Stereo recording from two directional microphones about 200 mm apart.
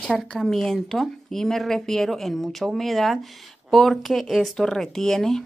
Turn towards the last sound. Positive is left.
turn(degrees=0)  # may be behind; listen again after turning